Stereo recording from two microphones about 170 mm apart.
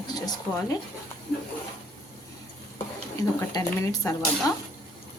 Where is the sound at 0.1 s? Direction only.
20° left (ahead or behind).